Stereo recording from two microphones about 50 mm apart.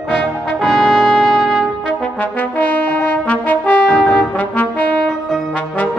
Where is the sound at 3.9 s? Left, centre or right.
Centre.